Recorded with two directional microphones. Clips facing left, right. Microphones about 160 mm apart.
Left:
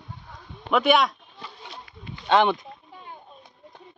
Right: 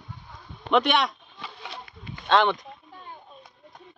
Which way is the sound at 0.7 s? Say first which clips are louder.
Left 2 dB; 5° left (ahead or behind).